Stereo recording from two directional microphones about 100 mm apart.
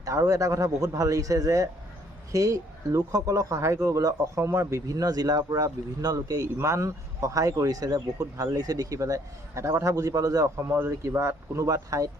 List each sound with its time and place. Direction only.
0.0 s speech: 35° right (ahead or behind)